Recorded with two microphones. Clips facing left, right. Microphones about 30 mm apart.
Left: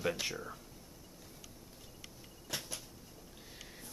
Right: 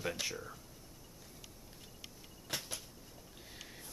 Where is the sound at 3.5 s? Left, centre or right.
Centre.